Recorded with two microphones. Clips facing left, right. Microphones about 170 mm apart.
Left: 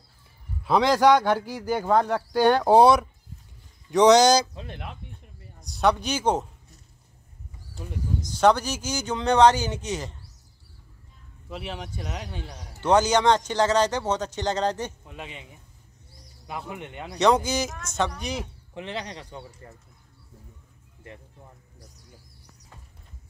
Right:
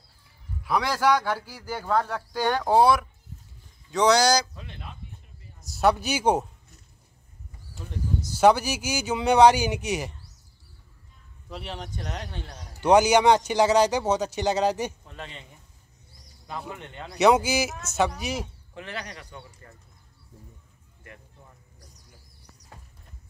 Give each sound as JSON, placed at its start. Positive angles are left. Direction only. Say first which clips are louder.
{"t": 0.7, "sound": "a man's voice", "louder": "left 5 dB", "side_deg": 20}
{"t": 4.7, "sound": "speech", "louder": "left 4 dB", "side_deg": 65}
{"t": 5.6, "sound": "speech", "louder": "even", "side_deg": -5}
{"t": 8.2, "sound": "a man's voice", "louder": "right 1 dB", "side_deg": -10}
{"t": 11.4, "sound": "speech", "louder": "left 2 dB", "side_deg": 5}
{"t": 12.8, "sound": "a man's voice", "louder": "right 2 dB", "side_deg": -10}
{"t": 15.0, "sound": "speech", "louder": "left 1 dB", "side_deg": 10}
{"t": 16.4, "sound": "speech", "louder": "left 1 dB", "side_deg": 15}
{"t": 17.2, "sound": "a man's voice", "louder": "right 1 dB", "side_deg": -10}
{"t": 18.8, "sound": "a man's voice", "louder": "left 3 dB", "side_deg": 20}